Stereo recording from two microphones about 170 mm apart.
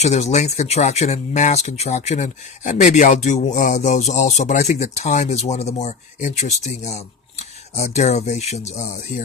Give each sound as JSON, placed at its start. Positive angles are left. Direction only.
{"t": 0.0, "sound": "speech", "side_deg": 40}